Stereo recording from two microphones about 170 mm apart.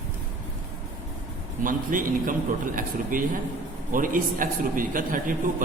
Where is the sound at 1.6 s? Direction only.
55° right (ahead or behind).